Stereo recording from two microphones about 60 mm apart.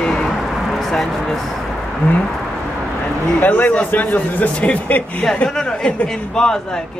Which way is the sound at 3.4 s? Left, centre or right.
Left.